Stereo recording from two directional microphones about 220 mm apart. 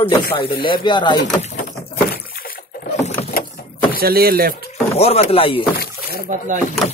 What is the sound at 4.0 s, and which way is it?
Speech, 45° right (ahead or behind).